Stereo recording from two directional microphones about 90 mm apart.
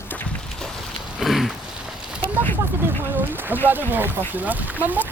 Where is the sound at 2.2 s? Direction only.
20° left (ahead or behind).